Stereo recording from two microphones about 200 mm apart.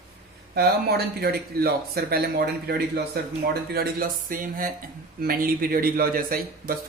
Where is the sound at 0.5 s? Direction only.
50° right (ahead or behind).